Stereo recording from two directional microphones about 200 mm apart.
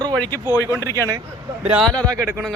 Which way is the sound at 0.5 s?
15° left (ahead or behind).